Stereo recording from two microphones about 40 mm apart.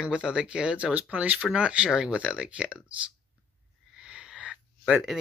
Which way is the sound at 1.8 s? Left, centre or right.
Centre.